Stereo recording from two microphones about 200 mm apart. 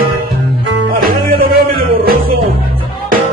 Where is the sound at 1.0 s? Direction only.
50° right (ahead or behind).